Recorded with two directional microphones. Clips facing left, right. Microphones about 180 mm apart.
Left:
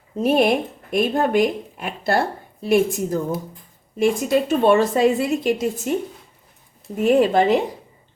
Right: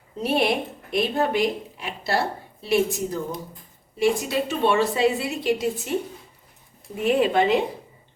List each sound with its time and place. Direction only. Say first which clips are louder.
0.2 s speech: left 5 dB; 45° left (ahead or behind)
7.0 s speech: left 4 dB; 45° left (ahead or behind)